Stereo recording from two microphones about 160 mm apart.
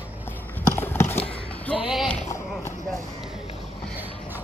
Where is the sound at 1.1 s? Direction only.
35° left (ahead or behind).